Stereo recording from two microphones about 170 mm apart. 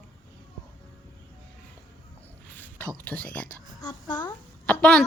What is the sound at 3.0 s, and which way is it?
Speech, 10° left (ahead or behind).